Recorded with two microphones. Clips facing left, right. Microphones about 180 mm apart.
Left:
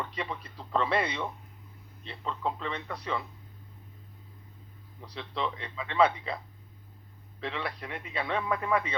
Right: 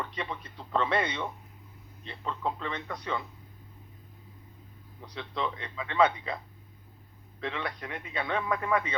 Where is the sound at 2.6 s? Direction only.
30° left (ahead or behind).